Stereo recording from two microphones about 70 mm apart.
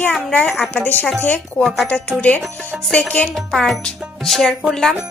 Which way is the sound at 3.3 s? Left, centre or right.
Centre.